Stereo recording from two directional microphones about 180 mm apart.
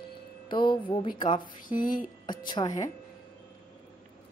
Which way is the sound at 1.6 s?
50° left (ahead or behind).